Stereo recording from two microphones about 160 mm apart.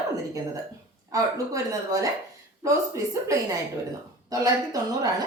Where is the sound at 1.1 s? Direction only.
20° right (ahead or behind).